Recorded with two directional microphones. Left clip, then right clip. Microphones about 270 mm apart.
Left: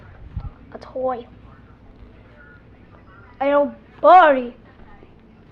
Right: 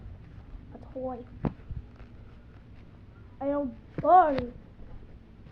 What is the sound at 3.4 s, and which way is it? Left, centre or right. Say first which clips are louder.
Speech: left 13 dB; left.